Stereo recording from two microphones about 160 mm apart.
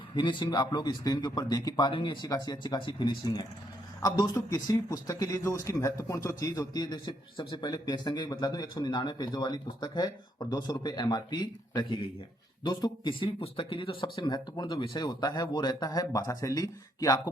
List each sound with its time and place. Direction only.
0.1 s a man's voice: 30° left (ahead or behind)